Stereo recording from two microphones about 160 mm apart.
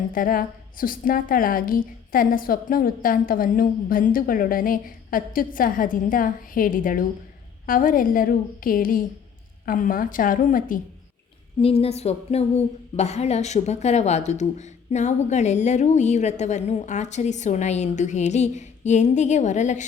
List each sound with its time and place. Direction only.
0.1 s a woman's voice: 60° left (ahead or behind)
11.6 s a woman's voice: 40° left (ahead or behind)